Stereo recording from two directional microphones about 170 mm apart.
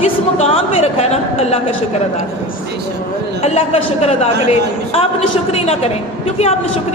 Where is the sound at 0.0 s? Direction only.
40° left (ahead or behind).